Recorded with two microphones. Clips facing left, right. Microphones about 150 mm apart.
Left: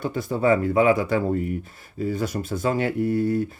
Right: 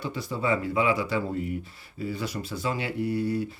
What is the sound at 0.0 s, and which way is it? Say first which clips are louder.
Speech: left 7 dB; 50° left (ahead or behind).